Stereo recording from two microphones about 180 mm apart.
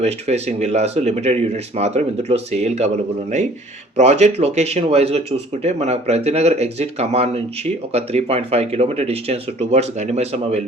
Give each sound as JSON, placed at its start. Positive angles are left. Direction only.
{"t": 0.0, "sound": "speech", "side_deg": -35}